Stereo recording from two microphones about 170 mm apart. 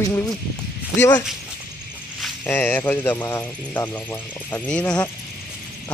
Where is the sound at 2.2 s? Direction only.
10° left (ahead or behind).